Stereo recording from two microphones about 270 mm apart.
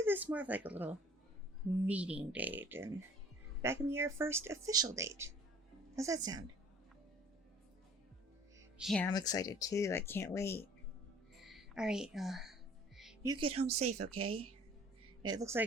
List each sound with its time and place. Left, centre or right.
0.0 s speech: centre
1.9 s speech: centre
8.8 s speech: centre
11.4 s a woman's voice: centre
13.2 s speech: centre
14.1 s a woman's voice: right
15.3 s speech: centre